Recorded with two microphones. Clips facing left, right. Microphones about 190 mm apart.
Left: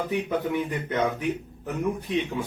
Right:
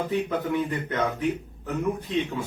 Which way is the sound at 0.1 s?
15° left (ahead or behind).